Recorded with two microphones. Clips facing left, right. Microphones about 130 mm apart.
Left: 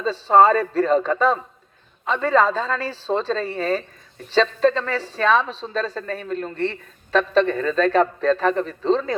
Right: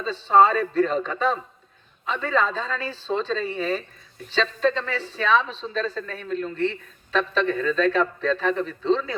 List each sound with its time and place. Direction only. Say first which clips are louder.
0.0 s speech: left 3 dB; 40° left (ahead or behind)